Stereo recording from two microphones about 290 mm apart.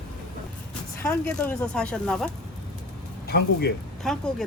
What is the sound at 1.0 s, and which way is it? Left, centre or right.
Speech, centre.